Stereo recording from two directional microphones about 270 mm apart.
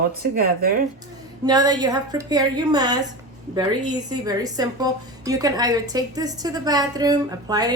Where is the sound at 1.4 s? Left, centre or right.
Centre.